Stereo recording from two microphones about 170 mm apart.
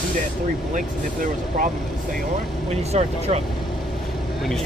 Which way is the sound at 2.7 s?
40° right (ahead or behind).